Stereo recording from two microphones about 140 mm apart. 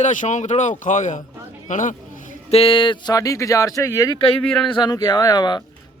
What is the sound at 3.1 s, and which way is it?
Speech, 25° left (ahead or behind).